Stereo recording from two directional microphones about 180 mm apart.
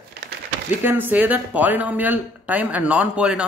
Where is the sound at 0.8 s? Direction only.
10° right (ahead or behind).